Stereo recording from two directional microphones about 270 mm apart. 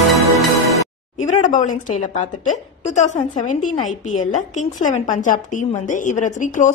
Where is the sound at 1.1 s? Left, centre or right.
Left.